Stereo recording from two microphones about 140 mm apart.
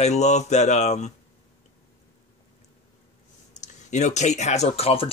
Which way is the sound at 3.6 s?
55° left (ahead or behind).